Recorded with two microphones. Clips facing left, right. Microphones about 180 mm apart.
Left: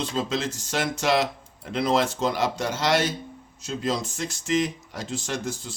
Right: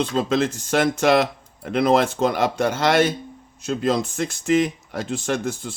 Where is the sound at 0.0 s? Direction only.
55° right (ahead or behind).